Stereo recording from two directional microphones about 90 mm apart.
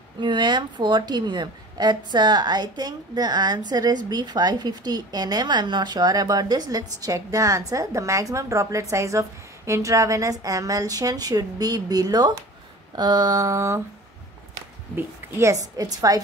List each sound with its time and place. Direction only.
0.2 s a woman's voice: 60° right (ahead or behind); by 13.8 s 35° right (ahead or behind)
15.0 s a woman's voice: 30° right (ahead or behind)